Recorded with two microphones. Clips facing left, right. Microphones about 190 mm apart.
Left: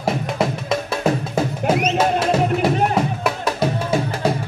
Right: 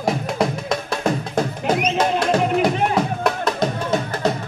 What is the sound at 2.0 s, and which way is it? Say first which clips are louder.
Music: left 1 dB; 5° left (ahead or behind).